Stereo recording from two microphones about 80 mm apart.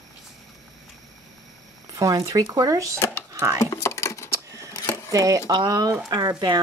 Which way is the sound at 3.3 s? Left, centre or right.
Right.